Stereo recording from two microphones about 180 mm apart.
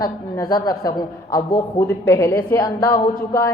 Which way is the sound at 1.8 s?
15° left (ahead or behind).